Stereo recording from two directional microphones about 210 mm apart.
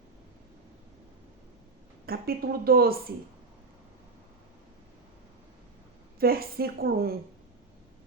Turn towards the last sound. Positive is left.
turn(degrees=-45)  # may be behind; listen again after turning